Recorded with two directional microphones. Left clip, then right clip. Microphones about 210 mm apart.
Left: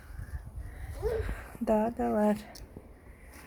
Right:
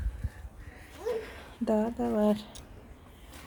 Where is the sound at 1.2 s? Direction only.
15° right (ahead or behind).